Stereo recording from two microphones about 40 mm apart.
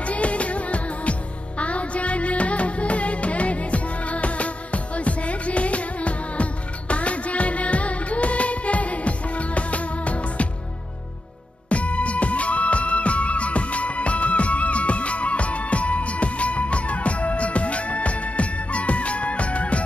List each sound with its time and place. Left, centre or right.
0.0 s music: left
11.7 s music: left